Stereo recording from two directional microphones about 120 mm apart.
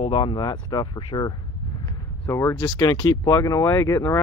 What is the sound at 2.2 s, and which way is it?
Speech, 20° left (ahead or behind).